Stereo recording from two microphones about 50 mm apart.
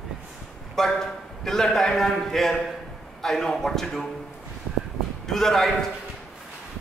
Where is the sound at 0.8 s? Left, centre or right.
Centre.